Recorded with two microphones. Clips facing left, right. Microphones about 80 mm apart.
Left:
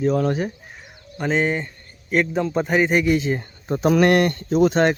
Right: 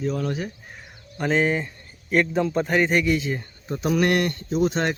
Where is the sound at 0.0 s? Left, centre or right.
Left.